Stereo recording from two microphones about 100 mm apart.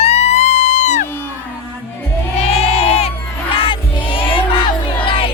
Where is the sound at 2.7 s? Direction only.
85° left.